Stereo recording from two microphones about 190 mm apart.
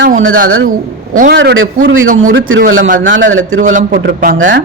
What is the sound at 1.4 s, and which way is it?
Speech, 75° right (ahead or behind).